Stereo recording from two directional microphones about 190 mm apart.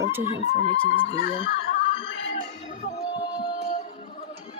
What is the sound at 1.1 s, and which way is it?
Speech, 35° left (ahead or behind).